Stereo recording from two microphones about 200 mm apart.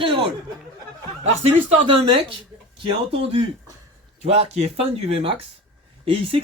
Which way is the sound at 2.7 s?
25° right (ahead or behind).